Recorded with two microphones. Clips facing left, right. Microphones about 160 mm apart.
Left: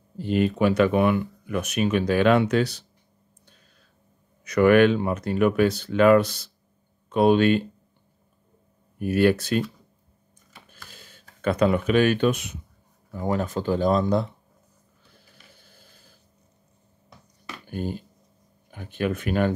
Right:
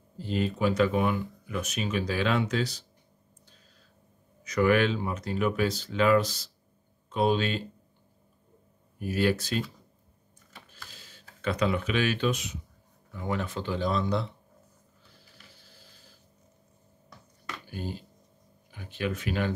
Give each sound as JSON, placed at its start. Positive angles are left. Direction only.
{"t": 0.2, "sound": "speech", "side_deg": 65}
{"t": 4.5, "sound": "speech", "side_deg": 60}
{"t": 9.0, "sound": "speech", "side_deg": 55}
{"t": 10.7, "sound": "typing", "side_deg": 55}
{"t": 11.4, "sound": "speech", "side_deg": 50}
{"t": 13.1, "sound": "speech", "side_deg": 40}
{"t": 17.6, "sound": "speech", "side_deg": 50}